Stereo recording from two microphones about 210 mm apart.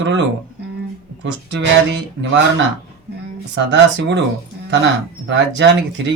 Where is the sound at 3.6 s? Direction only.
55° right (ahead or behind).